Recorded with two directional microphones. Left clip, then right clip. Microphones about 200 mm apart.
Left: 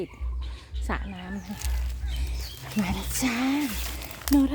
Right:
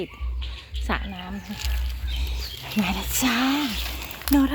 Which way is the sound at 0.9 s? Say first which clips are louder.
Right 5 dB; 5° left (ahead or behind).